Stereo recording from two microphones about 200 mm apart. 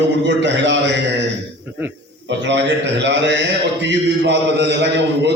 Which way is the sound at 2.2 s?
65° right (ahead or behind).